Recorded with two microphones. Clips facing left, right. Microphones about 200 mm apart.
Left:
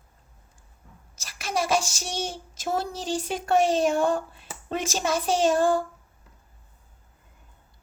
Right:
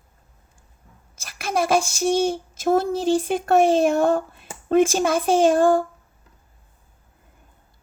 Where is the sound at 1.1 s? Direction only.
55° right (ahead or behind).